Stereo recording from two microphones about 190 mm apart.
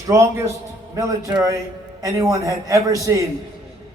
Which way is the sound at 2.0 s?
20° right (ahead or behind).